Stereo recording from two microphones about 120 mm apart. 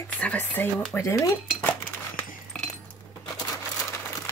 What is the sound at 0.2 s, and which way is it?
Speech, 15° left (ahead or behind).